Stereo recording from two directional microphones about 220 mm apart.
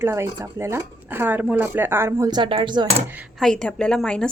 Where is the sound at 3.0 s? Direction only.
5° right (ahead or behind).